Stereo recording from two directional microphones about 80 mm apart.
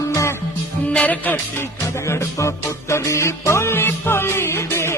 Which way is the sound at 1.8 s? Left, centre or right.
Left.